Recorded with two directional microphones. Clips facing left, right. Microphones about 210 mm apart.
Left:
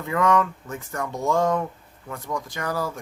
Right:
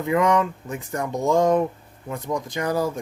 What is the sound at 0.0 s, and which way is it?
Speech, 15° right (ahead or behind).